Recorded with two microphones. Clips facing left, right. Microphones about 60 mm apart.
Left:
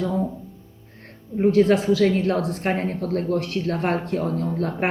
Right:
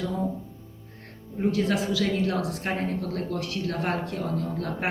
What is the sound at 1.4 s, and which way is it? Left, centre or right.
Speech, left.